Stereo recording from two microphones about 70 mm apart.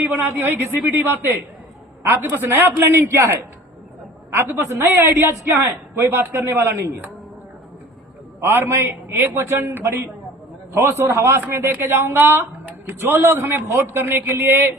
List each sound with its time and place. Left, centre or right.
0.3 s a woman's voice: right
4.4 s a man's voice: right
8.4 s a man's voice: right